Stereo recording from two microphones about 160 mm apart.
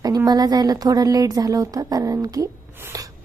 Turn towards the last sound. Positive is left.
turn(degrees=-20)  # may be behind; listen again after turning